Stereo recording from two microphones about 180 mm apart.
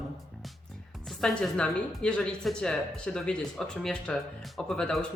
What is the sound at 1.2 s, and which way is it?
Speech, 5° left (ahead or behind).